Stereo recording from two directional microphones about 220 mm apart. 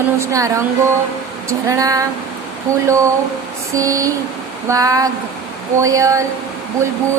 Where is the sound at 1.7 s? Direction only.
15° right (ahead or behind).